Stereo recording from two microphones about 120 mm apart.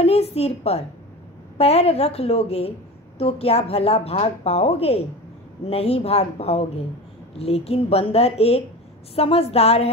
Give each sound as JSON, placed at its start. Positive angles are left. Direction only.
{"t": 0.0, "sound": "a woman's voice", "side_deg": 60}